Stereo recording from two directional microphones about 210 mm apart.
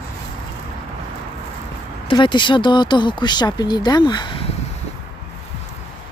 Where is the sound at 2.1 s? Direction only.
20° left (ahead or behind).